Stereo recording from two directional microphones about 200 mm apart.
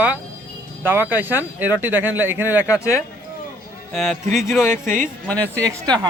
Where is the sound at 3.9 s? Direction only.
Centre (ahead or behind).